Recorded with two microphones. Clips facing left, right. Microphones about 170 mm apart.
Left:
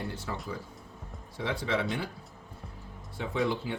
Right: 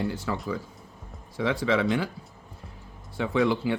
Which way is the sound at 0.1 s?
90° right.